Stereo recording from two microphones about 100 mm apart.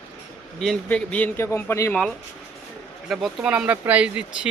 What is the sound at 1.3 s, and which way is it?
Speech, 25° left (ahead or behind).